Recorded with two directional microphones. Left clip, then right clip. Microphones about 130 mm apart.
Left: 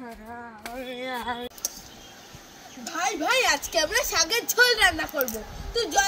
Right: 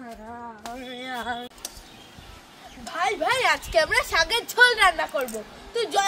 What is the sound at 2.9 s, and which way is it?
A woman's voice, 15° right (ahead or behind).